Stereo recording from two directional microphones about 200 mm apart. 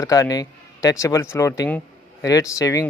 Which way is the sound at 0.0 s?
15° left (ahead or behind).